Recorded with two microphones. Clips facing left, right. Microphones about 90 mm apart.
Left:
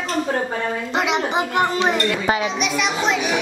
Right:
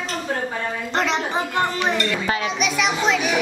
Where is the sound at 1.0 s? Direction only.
15° left (ahead or behind).